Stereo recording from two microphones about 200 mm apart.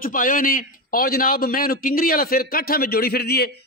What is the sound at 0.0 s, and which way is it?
A man's voice, 45° left (ahead or behind).